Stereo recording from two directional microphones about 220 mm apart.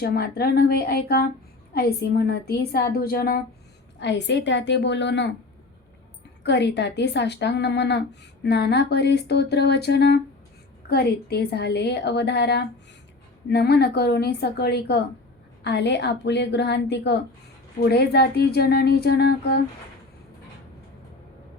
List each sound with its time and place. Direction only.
0.0 s speech: 45° left (ahead or behind)
6.4 s speech: 50° left (ahead or behind)